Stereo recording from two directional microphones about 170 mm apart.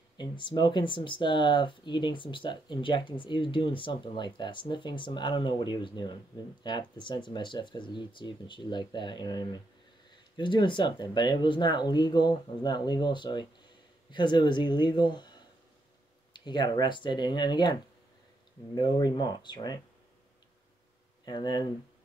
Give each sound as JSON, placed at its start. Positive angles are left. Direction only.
{"t": 0.2, "sound": "speech", "side_deg": 25}
{"t": 18.8, "sound": "speech", "side_deg": 25}
{"t": 21.3, "sound": "speech", "side_deg": 25}